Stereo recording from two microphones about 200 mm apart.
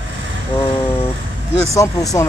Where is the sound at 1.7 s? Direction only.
15° left (ahead or behind).